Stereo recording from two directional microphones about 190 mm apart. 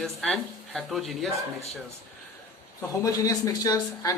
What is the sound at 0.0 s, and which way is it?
Speech, centre (ahead or behind).